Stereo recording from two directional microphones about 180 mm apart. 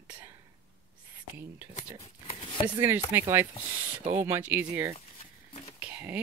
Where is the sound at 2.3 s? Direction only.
30° left (ahead or behind).